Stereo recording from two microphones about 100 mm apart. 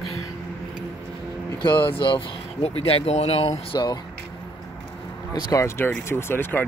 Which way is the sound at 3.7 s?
45° left (ahead or behind).